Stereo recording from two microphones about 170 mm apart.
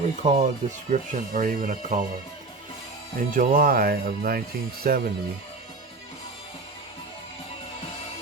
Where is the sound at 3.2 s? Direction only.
55° right (ahead or behind).